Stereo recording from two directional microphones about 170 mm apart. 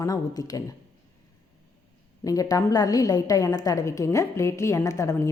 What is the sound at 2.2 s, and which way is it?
A woman's voice, 20° left (ahead or behind).